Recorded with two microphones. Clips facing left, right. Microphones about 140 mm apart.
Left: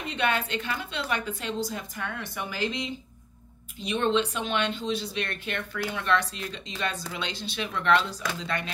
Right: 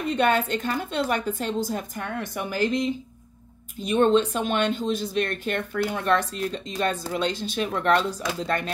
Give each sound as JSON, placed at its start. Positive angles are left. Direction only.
{"t": 0.0, "sound": "speech", "side_deg": -45}